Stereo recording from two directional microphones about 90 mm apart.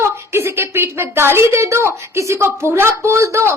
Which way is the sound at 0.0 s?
30° right (ahead or behind).